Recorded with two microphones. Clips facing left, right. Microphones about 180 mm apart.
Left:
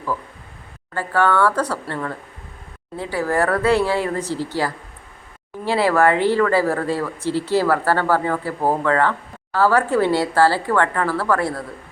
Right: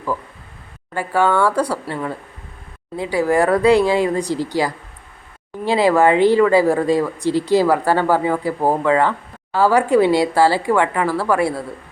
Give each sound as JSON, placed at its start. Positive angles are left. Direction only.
{"t": 0.9, "sound": "speech", "side_deg": -15}